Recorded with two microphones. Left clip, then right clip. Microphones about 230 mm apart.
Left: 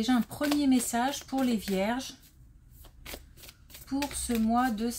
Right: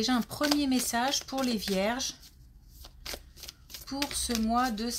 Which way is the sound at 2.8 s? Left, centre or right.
Centre.